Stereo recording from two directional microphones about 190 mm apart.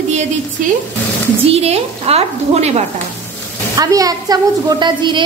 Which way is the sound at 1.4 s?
35° right (ahead or behind).